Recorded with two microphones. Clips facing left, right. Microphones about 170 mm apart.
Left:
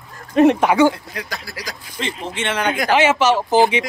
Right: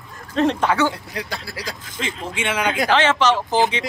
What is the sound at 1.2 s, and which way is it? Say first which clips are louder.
Speech: right 1 dB; 30° right (ahead or behind).